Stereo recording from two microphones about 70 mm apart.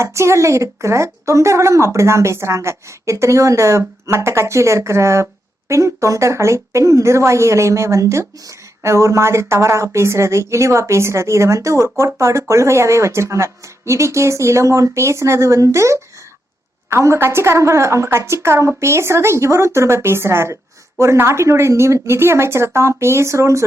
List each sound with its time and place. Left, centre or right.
0.0 s a woman's voice: right